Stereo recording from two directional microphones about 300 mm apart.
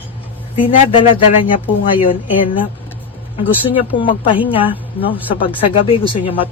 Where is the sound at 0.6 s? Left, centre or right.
Centre.